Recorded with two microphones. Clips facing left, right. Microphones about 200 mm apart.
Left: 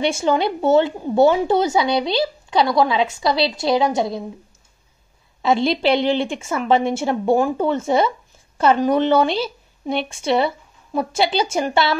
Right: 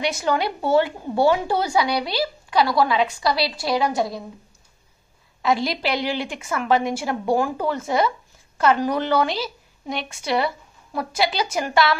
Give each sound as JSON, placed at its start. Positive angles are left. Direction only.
{"t": 0.0, "sound": "a woman's voice", "side_deg": 25}
{"t": 5.4, "sound": "a woman's voice", "side_deg": 25}